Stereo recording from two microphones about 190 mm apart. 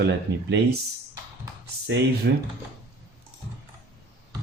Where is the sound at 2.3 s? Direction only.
60° right (ahead or behind).